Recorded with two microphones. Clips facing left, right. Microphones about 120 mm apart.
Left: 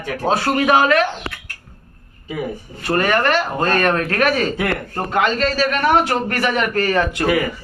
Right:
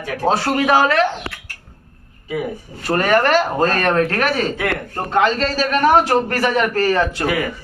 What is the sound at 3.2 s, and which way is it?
Speech, 30° right (ahead or behind).